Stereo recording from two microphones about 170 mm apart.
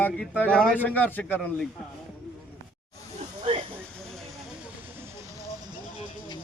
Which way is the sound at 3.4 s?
30° right (ahead or behind).